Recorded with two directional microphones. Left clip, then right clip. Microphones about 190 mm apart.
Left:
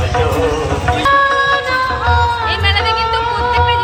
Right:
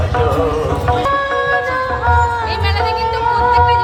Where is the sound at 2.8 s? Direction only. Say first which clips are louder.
Left 1 dB; 45° right (ahead or behind).